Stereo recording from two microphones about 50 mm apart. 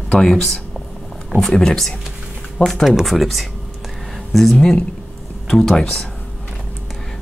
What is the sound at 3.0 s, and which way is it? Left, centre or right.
Speech, centre.